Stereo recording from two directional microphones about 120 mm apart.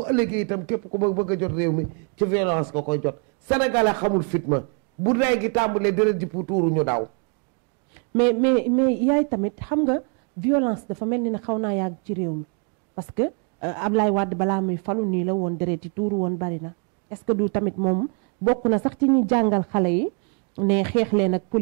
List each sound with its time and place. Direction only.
0.0 s a woman's voice: 10° right (ahead or behind)
8.1 s a woman's voice: 15° right (ahead or behind)